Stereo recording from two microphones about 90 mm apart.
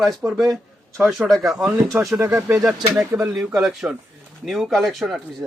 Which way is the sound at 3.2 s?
5° right (ahead or behind).